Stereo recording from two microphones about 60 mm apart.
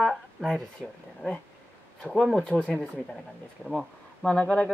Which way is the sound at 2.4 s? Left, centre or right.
Centre.